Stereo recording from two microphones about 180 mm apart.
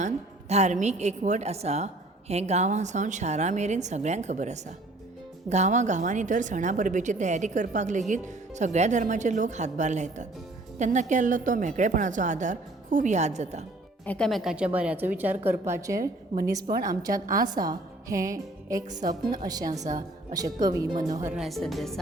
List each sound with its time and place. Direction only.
0.0 s a woman's voice: 40° right (ahead or behind)
14.0 s a woman's voice: 5° left (ahead or behind); by 16.0 s 15° right (ahead or behind)
16.0 s a woman's voice: 50° right (ahead or behind)
17.0 s a woman's voice: 20° right (ahead or behind)
19.8 s a woman's voice: 45° right (ahead or behind)
20.3 s a woman's voice: 20° right (ahead or behind)
21.3 s speech: centre (ahead or behind)